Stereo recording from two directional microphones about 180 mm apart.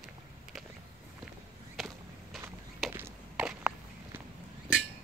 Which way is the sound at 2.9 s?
10° right (ahead or behind).